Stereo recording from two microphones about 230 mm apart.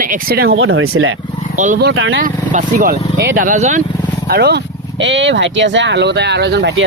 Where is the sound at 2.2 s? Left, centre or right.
Right.